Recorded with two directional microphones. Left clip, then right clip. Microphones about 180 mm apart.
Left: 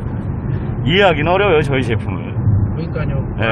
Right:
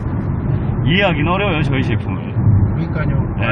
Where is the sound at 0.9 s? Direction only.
35° left (ahead or behind).